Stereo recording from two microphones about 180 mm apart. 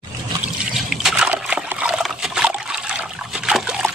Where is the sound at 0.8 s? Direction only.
5° right (ahead or behind).